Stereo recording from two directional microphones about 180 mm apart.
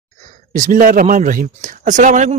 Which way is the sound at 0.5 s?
50° right (ahead or behind).